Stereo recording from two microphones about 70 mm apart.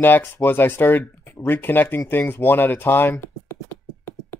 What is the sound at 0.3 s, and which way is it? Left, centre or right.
Speech, left.